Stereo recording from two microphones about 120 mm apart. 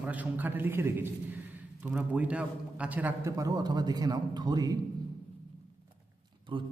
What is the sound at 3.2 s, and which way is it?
A man's voice, 30° right (ahead or behind).